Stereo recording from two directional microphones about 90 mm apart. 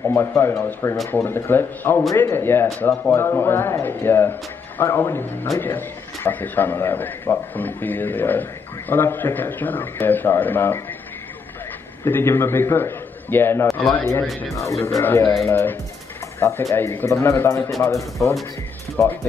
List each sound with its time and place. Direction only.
0.0 s a man's voice: 25° left (ahead or behind)
12.0 s a man's voice: 25° left (ahead or behind)
15.0 s a man's voice: 20° left (ahead or behind)